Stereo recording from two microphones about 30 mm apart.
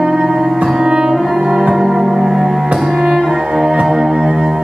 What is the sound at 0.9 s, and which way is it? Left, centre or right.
Music, right.